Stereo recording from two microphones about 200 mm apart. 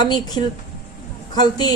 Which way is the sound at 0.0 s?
20° left (ahead or behind).